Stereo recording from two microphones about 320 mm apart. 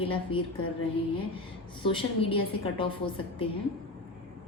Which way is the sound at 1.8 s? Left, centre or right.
Centre.